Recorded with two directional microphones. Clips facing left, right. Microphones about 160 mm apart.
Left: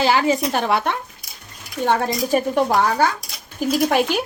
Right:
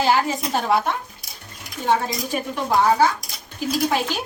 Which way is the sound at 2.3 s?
45° left (ahead or behind).